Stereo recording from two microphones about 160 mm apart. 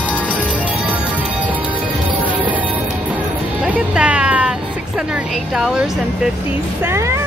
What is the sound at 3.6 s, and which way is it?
Vehicle, 5° right (ahead or behind).